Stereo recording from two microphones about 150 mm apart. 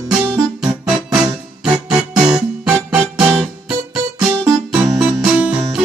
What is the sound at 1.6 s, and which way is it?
Music, 5° right (ahead or behind).